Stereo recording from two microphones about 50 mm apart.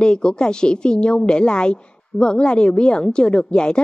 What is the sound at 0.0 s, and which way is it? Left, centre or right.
A woman's voice, centre.